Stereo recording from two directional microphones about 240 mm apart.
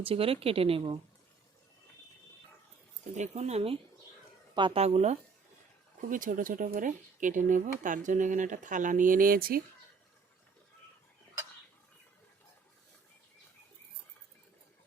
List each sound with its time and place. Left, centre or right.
0.0 s a woman's voice: right
3.0 s a woman's voice: right